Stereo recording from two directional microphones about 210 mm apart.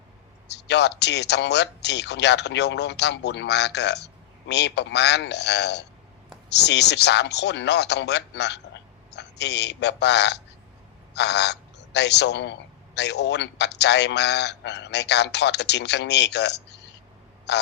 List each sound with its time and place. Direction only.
0.4 s a man's voice: 55° left (ahead or behind)